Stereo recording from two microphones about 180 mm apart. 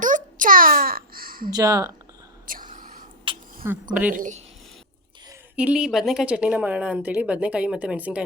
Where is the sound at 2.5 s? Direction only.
50° right (ahead or behind).